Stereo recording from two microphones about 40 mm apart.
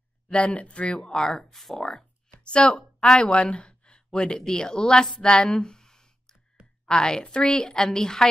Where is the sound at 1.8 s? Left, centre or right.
Left.